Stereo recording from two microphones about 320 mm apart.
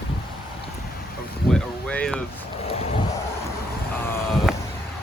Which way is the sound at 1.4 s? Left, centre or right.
Left.